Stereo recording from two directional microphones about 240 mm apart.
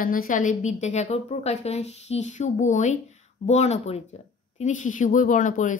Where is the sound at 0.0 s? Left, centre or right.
Left.